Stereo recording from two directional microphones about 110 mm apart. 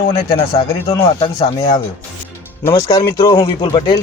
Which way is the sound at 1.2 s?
55° left (ahead or behind).